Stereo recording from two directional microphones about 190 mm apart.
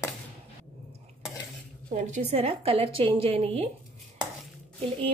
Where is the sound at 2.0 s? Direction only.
35° right (ahead or behind).